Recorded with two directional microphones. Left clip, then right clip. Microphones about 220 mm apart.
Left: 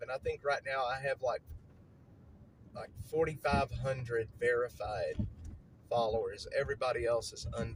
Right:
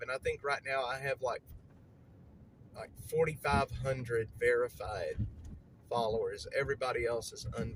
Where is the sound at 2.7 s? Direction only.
15° right (ahead or behind).